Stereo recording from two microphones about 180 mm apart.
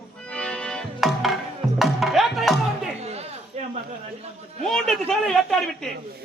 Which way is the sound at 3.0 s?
35° right (ahead or behind).